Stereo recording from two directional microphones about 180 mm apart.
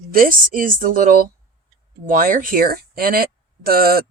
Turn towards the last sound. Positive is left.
turn(degrees=-55)  # may be behind; listen again after turning